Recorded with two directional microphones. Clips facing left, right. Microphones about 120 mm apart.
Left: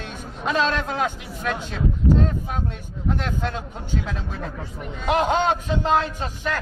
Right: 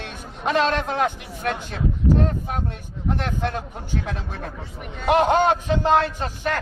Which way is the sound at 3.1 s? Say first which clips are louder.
Right 1 dB; 55° right (ahead or behind).